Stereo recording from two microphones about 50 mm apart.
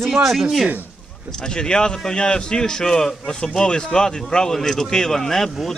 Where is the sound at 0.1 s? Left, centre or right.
Centre.